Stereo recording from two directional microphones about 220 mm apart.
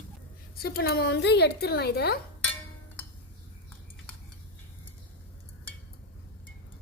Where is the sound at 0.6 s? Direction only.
45° left (ahead or behind).